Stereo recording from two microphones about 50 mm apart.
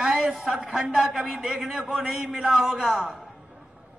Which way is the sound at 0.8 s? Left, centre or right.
Right.